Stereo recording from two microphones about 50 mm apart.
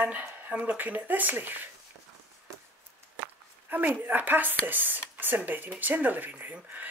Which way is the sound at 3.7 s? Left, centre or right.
Right.